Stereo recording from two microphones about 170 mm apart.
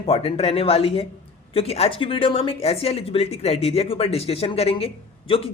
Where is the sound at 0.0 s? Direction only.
35° left (ahead or behind).